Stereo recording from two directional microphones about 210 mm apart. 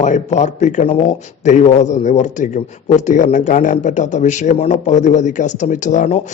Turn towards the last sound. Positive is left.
turn(degrees=35)  # may be behind; listen again after turning